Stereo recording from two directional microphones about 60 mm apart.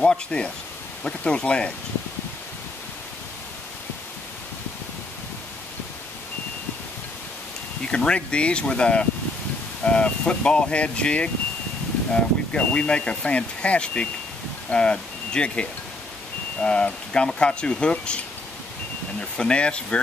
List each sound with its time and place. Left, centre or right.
0.0 s speech: centre
7.8 s speech: centre